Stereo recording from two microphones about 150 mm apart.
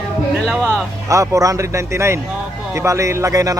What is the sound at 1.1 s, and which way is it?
Speech, 20° right (ahead or behind).